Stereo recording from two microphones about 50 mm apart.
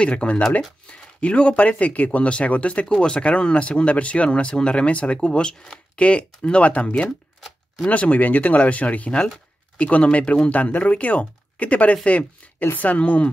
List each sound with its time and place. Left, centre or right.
0.0 s speech: left